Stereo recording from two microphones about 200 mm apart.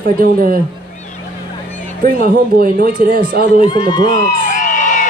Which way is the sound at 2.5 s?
45° right (ahead or behind).